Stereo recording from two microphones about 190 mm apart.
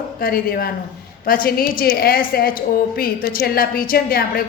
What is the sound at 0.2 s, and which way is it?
A woman's voice, 50° left (ahead or behind).